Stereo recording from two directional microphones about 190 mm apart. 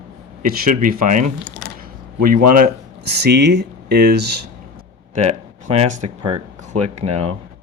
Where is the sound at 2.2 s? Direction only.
50° right (ahead or behind).